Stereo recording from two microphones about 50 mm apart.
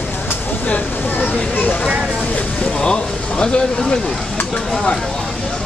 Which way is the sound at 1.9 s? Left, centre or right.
Centre.